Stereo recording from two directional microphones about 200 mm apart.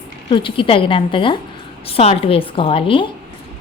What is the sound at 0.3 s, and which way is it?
A woman's voice, 25° left (ahead or behind).